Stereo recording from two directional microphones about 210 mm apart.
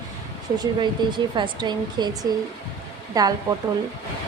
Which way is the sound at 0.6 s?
20° right (ahead or behind).